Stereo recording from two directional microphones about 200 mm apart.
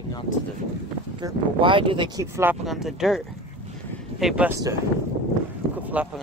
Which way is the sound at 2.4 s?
5° right (ahead or behind).